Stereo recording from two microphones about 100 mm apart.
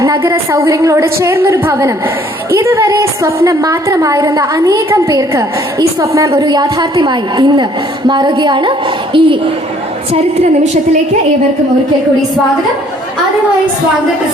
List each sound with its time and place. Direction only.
0.2 s a woman's voice: 30° right (ahead or behind)
6.4 s a woman's voice: 45° right (ahead or behind); by 9.3 s 60° right (ahead or behind)